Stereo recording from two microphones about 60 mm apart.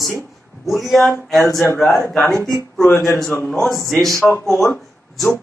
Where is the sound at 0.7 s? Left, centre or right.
Centre.